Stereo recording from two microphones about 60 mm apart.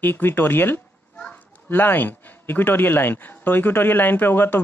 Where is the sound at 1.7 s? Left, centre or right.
Left.